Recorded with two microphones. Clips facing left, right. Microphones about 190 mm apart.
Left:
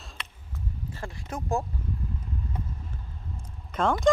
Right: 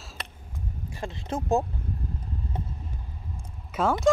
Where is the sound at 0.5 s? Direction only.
15° right (ahead or behind).